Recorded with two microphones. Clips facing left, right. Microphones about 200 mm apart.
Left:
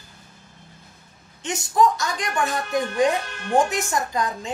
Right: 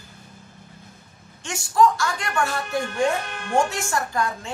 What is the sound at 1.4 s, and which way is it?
A woman's voice, 20° left (ahead or behind).